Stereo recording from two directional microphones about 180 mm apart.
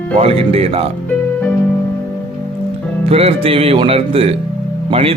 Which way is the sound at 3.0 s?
35° right (ahead or behind).